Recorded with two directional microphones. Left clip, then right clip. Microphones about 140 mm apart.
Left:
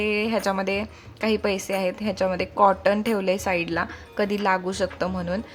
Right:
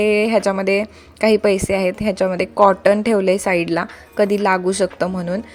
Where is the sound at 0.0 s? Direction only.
35° right (ahead or behind).